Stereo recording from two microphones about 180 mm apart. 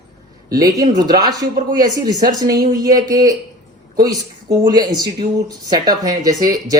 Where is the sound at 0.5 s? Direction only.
20° right (ahead or behind).